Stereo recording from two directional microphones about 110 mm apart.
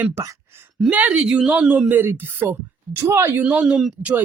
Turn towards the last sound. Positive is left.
turn(degrees=-5)  # may be behind; listen again after turning